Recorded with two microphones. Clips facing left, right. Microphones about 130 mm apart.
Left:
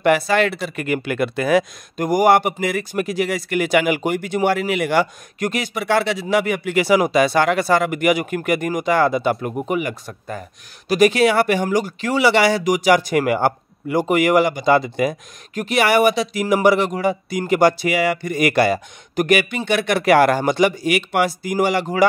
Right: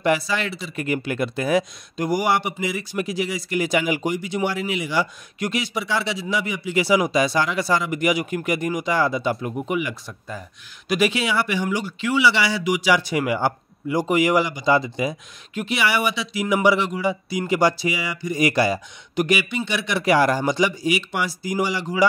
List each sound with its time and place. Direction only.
0.0 s speech: 60° left (ahead or behind)
9.5 s speech: 40° left (ahead or behind)